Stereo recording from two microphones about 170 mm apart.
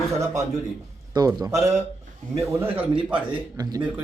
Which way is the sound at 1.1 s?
20° right (ahead or behind).